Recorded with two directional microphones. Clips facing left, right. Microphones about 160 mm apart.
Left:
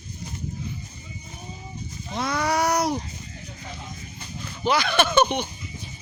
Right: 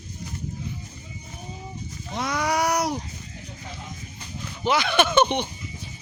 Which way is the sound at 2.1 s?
15° right (ahead or behind).